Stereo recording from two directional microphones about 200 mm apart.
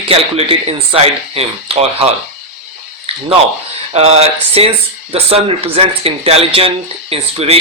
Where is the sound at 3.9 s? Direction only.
30° right (ahead or behind).